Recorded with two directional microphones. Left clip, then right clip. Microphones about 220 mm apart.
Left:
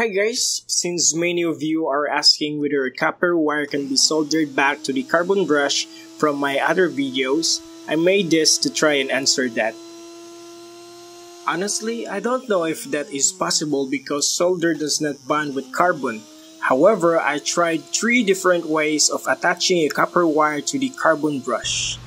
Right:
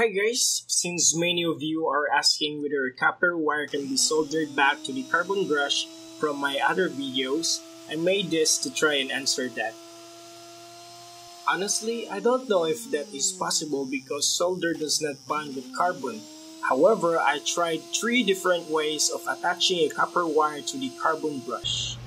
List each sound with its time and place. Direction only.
0.0 s speech: 30° left (ahead or behind)
11.4 s speech: 25° left (ahead or behind)
16.8 s speech: 25° left (ahead or behind)